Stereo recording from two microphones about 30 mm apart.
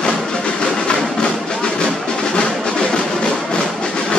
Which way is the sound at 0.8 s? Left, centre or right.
Left.